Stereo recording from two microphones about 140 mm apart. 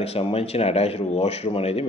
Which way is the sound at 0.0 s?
45° left (ahead or behind).